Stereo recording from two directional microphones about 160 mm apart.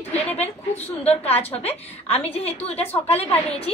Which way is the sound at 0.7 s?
40° left (ahead or behind).